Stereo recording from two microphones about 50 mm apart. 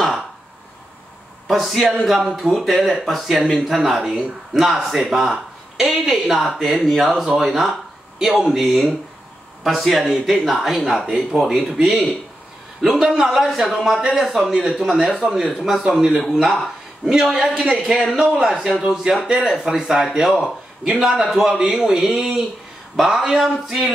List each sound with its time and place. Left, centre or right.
1.5 s speech: centre
10.0 s speech: centre